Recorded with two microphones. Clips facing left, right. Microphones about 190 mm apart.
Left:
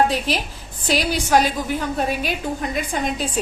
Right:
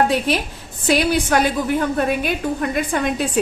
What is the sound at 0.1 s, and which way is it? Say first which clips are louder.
A woman's voice: right 4 dB; 60° right (ahead or behind).